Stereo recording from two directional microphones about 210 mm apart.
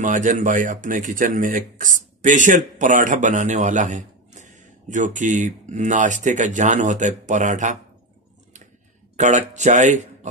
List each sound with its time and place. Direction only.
0.0 s a man's voice: 35° right (ahead or behind)
9.1 s a man's voice: 35° right (ahead or behind)